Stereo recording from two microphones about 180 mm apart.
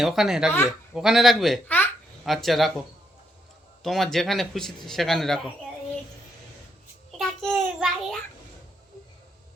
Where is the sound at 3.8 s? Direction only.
Centre (ahead or behind).